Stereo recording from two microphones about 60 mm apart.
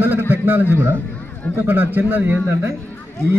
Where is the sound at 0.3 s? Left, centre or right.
Right.